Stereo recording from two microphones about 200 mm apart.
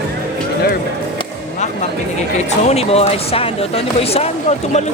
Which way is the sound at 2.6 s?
30° left (ahead or behind).